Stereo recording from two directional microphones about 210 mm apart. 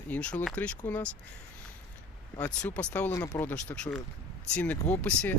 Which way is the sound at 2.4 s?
5° left (ahead or behind).